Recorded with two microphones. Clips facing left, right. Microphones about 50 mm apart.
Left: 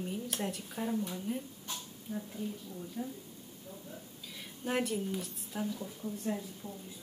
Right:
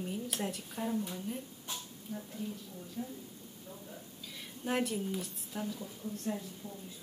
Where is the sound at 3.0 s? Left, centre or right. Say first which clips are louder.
Left 1 dB; centre.